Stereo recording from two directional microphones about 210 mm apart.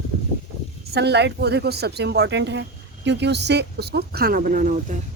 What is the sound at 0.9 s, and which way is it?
A woman's voice, 50° right (ahead or behind).